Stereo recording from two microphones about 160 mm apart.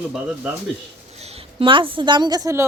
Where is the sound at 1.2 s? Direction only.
40° right (ahead or behind); by 2.6 s 20° right (ahead or behind).